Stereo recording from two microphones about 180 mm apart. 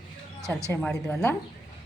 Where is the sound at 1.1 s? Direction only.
5° left (ahead or behind).